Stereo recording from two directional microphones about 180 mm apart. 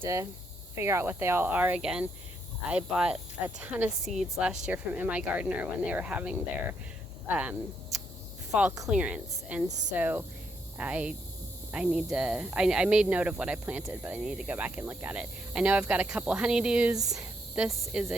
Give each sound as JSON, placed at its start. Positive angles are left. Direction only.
{"t": 0.0, "sound": "speech", "side_deg": -15}